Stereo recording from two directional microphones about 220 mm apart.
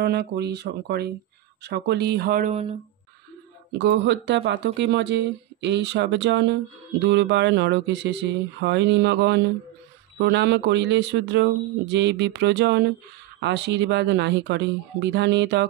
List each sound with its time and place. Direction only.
0.0 s speech: 45° right (ahead or behind)
3.7 s speech: 50° right (ahead or behind)